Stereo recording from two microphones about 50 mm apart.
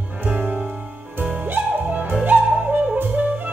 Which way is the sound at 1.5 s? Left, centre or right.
Right.